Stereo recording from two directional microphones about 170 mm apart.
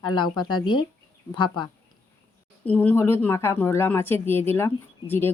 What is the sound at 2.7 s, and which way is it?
A woman's voice, 10° left (ahead or behind).